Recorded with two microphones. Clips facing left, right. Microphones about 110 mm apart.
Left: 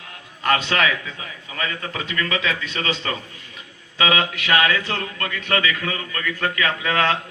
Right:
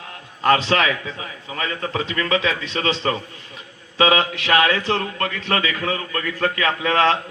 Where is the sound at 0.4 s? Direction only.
30° right (ahead or behind).